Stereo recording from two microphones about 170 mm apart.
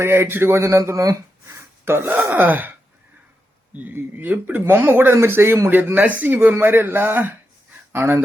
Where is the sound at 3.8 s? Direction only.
10° right (ahead or behind).